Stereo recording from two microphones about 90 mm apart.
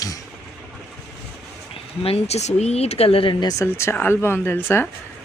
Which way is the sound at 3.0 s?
90° left.